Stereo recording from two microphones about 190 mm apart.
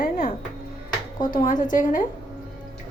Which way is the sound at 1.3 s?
45° left (ahead or behind).